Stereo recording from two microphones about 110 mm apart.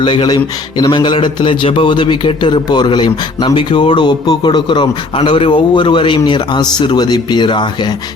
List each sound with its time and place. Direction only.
0.0 s a man's voice: 45° left (ahead or behind)